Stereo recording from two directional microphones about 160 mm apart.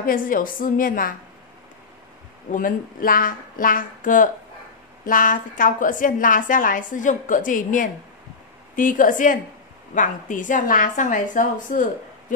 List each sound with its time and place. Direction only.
0.0 s a woman's voice: 60° left (ahead or behind)
2.5 s a woman's voice: 60° left (ahead or behind)